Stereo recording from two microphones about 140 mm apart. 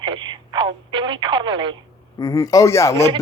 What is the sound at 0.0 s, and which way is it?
Telephone, 35° right (ahead or behind).